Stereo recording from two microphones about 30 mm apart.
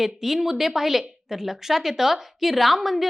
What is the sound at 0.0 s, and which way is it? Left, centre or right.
A woman's voice, centre.